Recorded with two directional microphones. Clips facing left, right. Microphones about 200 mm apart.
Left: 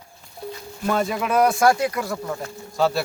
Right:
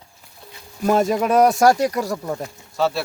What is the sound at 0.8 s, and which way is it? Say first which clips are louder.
Speech: right 5 dB; 40° right (ahead or behind).